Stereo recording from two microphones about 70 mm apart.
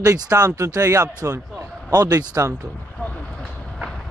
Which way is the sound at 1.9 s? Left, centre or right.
Right.